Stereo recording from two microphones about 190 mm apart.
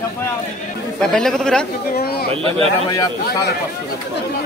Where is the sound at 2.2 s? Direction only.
30° right (ahead or behind).